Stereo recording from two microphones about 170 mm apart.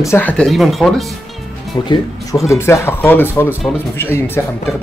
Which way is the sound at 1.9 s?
20° left (ahead or behind).